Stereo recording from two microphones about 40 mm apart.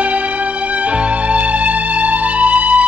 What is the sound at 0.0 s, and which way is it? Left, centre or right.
Music, right.